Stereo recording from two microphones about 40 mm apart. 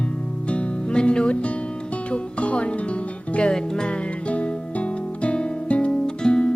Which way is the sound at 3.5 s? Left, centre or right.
Centre.